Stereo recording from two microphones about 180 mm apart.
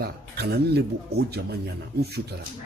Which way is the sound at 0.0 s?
65° right (ahead or behind).